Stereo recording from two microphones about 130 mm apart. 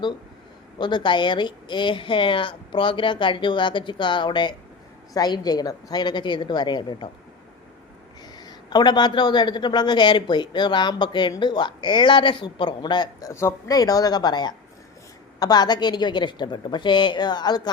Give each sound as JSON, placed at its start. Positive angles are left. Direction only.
{"t": 0.8, "sound": "speech", "side_deg": 35}
{"t": 8.4, "sound": "speech", "side_deg": 30}